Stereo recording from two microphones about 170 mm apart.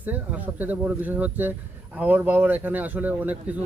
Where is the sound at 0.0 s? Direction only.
10° right (ahead or behind).